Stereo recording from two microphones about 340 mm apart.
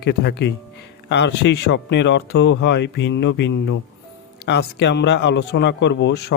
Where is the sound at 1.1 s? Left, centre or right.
Left.